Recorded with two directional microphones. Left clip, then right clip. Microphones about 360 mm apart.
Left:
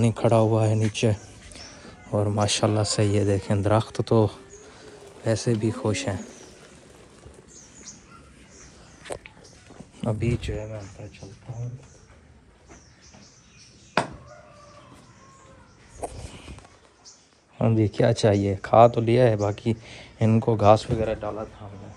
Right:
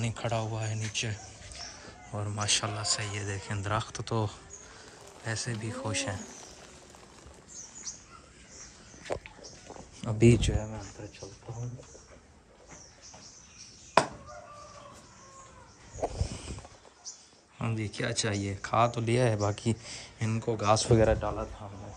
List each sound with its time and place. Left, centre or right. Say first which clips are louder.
0.0 s speech: left 13 dB; centre
10.1 s speech: right 11 dB; right
10.6 s speech: left 4 dB; centre
14.0 s a sound: right 1 dB; centre
17.6 s speech: left 13 dB; centre
21.0 s speech: right 1 dB; centre